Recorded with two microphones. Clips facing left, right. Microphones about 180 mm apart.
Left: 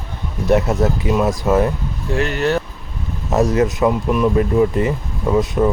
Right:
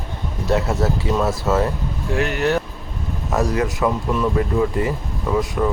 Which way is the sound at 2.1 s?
15° right (ahead or behind).